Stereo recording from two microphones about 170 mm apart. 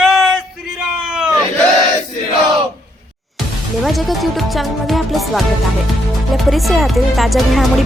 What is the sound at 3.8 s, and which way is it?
Speech, centre (ahead or behind).